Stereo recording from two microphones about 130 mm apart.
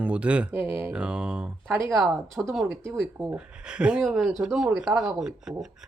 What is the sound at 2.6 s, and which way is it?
Speech, 15° right (ahead or behind).